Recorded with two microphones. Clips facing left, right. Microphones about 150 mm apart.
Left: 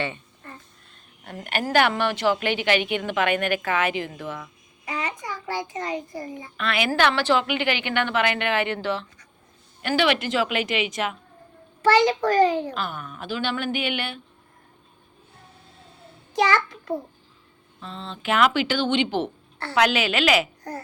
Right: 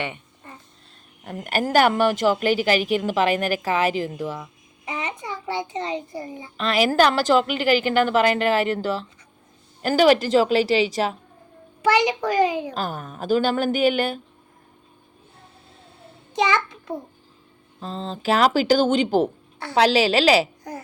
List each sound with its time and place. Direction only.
0.0 s a sound: 15° right (ahead or behind)
1.7 s a child's voice: 40° right (ahead or behind)
4.9 s a child's voice: 25° right (ahead or behind)
11.8 s a child's voice: 15° right (ahead or behind)
12.7 s a child's voice: 40° right (ahead or behind)
16.3 s child singing: 20° right (ahead or behind)
17.7 s a child's voice: 40° right (ahead or behind)